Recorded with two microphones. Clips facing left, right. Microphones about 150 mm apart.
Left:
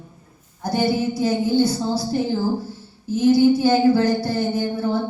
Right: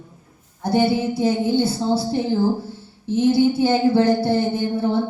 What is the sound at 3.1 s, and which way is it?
A woman's voice, 25° right (ahead or behind).